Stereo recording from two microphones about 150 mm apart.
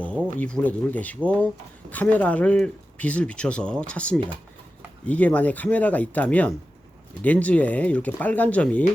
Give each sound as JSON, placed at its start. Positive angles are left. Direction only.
{"t": 0.3, "sound": "speech", "side_deg": 10}